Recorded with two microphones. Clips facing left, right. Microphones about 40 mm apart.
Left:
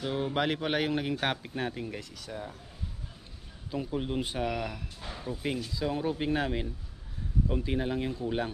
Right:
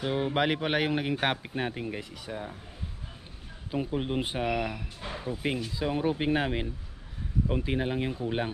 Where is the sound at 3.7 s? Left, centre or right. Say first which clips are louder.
Right 2 dB; right.